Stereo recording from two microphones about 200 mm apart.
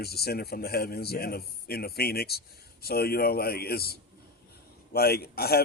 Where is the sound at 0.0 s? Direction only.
50° left (ahead or behind).